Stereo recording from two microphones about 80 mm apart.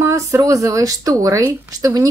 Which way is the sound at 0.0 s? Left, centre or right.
Right.